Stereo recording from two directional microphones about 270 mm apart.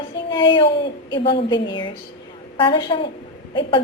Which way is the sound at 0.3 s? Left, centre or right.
Centre.